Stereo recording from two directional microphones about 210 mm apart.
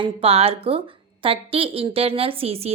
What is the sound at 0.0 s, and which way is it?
A woman's voice, 25° right (ahead or behind).